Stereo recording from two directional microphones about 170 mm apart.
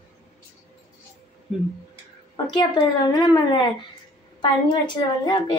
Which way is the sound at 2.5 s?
25° left (ahead or behind).